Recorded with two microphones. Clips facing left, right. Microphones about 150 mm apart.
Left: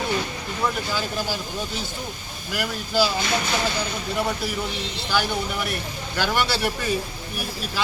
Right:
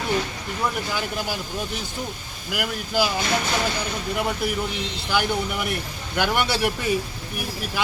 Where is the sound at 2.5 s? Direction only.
15° right (ahead or behind).